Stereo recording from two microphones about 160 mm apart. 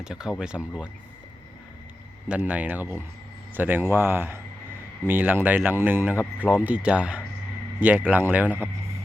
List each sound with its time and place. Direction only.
0.0 s speech: 5° right (ahead or behind)
2.3 s speech: 10° right (ahead or behind)